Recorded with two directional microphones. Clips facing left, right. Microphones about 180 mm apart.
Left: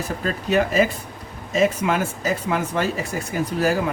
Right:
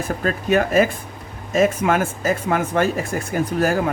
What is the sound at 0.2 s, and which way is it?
Speech, 50° right (ahead or behind).